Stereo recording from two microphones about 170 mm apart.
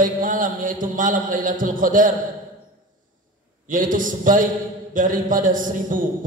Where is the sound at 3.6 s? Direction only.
50° right (ahead or behind).